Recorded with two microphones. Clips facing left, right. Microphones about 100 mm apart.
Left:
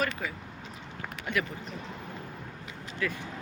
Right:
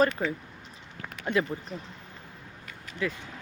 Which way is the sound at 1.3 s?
30° right (ahead or behind).